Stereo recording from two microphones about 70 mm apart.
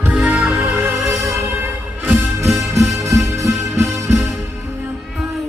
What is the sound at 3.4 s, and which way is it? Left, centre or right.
Music, right.